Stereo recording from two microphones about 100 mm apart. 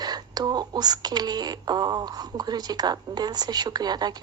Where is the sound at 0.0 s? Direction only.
40° right (ahead or behind).